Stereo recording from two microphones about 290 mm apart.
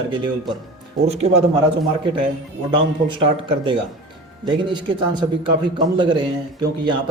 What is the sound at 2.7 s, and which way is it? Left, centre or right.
A man's voice, centre.